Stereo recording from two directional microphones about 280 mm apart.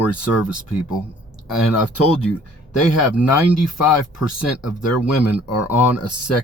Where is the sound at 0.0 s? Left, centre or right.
Left.